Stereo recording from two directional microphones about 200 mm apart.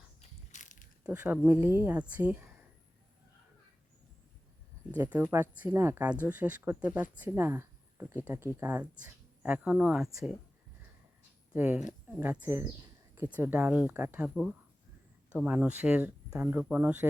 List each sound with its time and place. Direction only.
0.2 s mechanisms: 40° left (ahead or behind)
1.1 s speech: 10° right (ahead or behind)
4.9 s speech: 10° right (ahead or behind)
11.5 s speech: 5° right (ahead or behind)
15.4 s speech: 5° right (ahead or behind)